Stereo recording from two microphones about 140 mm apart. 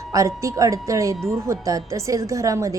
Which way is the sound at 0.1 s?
20° right (ahead or behind).